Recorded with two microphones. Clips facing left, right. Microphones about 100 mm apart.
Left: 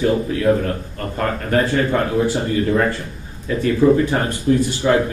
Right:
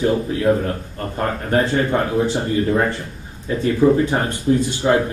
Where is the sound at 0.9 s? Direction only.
25° right (ahead or behind).